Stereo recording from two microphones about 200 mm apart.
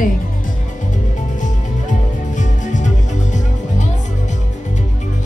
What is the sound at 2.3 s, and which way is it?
Music, 40° left (ahead or behind).